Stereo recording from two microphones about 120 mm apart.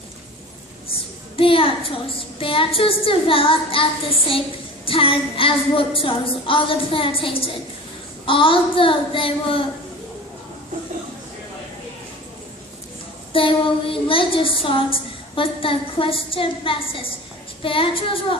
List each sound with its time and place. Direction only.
1.4 s a woman's voice: 50° left (ahead or behind)
4.9 s a woman's voice: 50° left (ahead or behind)
13.3 s a woman's voice: 50° left (ahead or behind)